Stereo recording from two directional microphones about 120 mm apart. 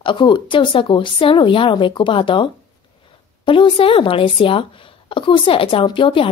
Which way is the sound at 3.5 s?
45° left (ahead or behind).